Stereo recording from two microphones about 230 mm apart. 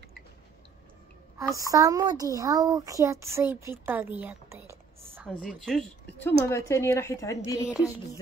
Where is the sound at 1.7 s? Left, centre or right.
Centre.